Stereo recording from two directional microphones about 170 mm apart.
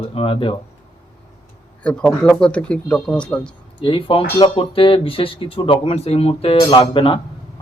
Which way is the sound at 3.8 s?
30° left (ahead or behind).